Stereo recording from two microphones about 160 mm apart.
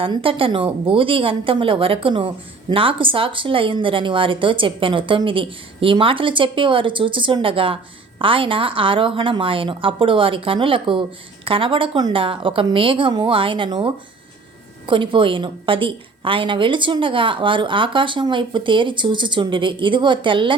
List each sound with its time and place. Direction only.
0.0 s speech: 35° right (ahead or behind)